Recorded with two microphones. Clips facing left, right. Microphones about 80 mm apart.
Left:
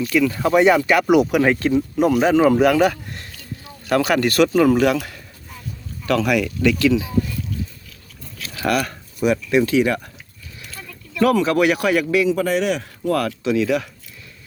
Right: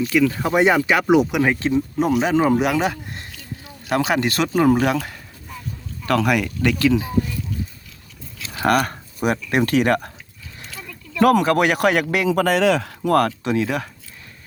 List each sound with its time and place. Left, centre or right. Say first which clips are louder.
0.0 s speech: even; right
1.3 s speech: left 2 dB; centre
2.3 s speech: left 3 dB; right
6.1 s speech: even; right
8.5 s speech: right 2 dB; right
11.2 s speech: right 1 dB; right
12.3 s speech: right 2 dB; right
13.1 s speech: right 2 dB; right